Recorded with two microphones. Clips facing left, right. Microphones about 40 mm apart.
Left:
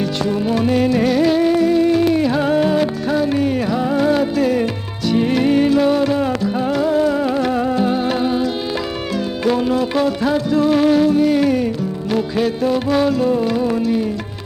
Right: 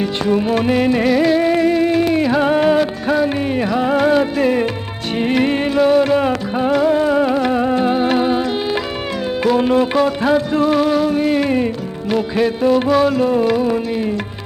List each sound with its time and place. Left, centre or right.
0.0 s music: right
1.0 s music: centre
1.5 s music: right
2.2 s music: centre
2.5 s music: right
9.6 s music: right
10.8 s music: centre
11.1 s music: right